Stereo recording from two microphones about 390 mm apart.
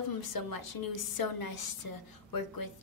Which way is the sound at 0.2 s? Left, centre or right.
Left.